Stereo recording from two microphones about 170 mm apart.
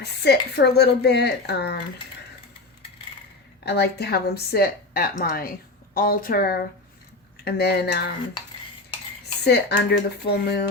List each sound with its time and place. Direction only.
0.0 s speech: 75° left (ahead or behind)
3.7 s speech: 75° left (ahead or behind)
7.4 s speech: 75° left (ahead or behind)
9.4 s speech: 75° left (ahead or behind)